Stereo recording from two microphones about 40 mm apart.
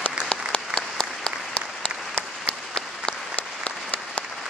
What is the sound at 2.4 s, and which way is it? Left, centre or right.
Applause, centre.